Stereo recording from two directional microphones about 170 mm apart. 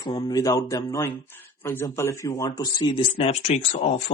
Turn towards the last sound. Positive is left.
turn(degrees=40)  # may be behind; listen again after turning